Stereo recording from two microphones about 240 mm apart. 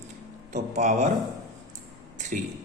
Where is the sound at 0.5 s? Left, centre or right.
Right.